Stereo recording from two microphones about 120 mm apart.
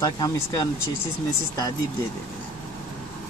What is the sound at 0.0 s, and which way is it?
Speech, 30° left (ahead or behind).